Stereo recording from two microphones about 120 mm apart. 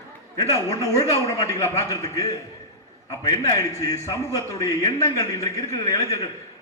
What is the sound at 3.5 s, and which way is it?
A man's voice, 25° left (ahead or behind).